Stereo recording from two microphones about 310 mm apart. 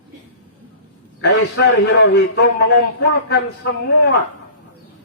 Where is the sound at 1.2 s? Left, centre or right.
Left.